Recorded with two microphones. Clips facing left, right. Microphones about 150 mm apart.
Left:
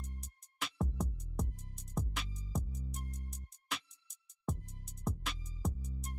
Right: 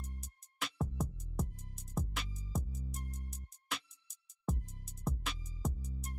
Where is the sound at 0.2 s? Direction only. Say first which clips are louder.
Right 1 dB; centre (ahead or behind).